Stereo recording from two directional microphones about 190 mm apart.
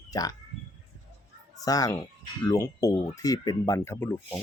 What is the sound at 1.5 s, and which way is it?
A child's voice, 20° left (ahead or behind).